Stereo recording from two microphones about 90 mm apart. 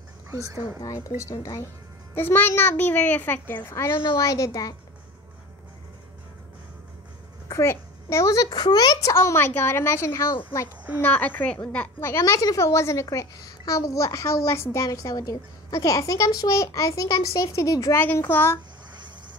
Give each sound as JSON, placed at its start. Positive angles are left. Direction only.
{"t": 0.3, "sound": "speech", "side_deg": -40}
{"t": 0.9, "sound": "speech", "side_deg": 35}
{"t": 2.1, "sound": "a child's voice", "side_deg": 25}
{"t": 7.4, "sound": "a child's voice", "side_deg": 35}
{"t": 9.1, "sound": "a child's voice", "side_deg": 30}
{"t": 11.0, "sound": "a woman's voice", "side_deg": 20}
{"t": 12.2, "sound": "speech", "side_deg": 40}
{"t": 14.9, "sound": "speech", "side_deg": 40}
{"t": 17.9, "sound": "a child's voice", "side_deg": 25}